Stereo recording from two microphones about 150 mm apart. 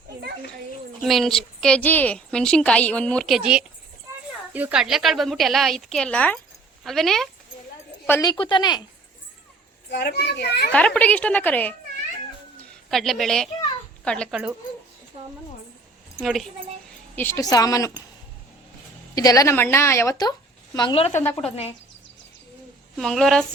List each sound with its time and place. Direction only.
1.0 s a woman's voice: centre (ahead or behind)
8.2 s speech: 30° left (ahead or behind)
9.9 s a child's voice: 90° left
10.7 s a woman's voice: 10° left (ahead or behind)
12.9 s a woman's voice: centre (ahead or behind)
15.1 s a woman's voice: 40° right (ahead or behind)
16.2 s a woman's voice: centre (ahead or behind)
17.2 s a woman's voice: 15° left (ahead or behind)
19.1 s a woman's voice: 25° left (ahead or behind)
20.7 s speech: 35° left (ahead or behind)
21.1 s a woman's voice: 15° left (ahead or behind)
21.3 s speech: 40° left (ahead or behind)
23.0 s a woman's voice: centre (ahead or behind)